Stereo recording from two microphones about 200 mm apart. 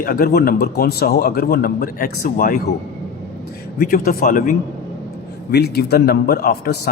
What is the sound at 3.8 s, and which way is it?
A man's voice, 45° left (ahead or behind).